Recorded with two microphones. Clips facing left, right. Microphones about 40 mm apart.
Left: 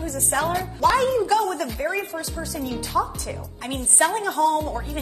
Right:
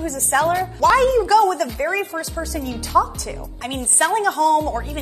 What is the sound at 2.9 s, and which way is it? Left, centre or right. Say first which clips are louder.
Speech: right 6 dB; right.